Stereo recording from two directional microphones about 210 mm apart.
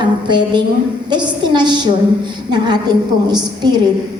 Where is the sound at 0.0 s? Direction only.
20° right (ahead or behind).